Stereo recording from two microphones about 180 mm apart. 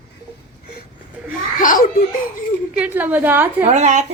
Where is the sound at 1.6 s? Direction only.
50° left (ahead or behind).